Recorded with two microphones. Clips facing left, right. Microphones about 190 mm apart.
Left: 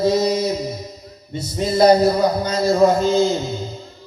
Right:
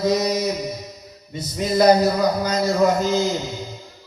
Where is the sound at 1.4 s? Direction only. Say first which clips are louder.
Left 2 dB; 30° left (ahead or behind).